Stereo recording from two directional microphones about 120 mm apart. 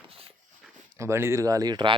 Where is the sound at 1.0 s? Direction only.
20° right (ahead or behind); by 1.9 s 40° right (ahead or behind).